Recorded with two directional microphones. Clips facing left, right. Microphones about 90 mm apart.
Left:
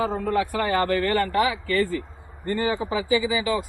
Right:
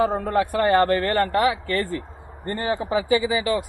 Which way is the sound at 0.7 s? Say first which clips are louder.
Right 4 dB; 50° right (ahead or behind).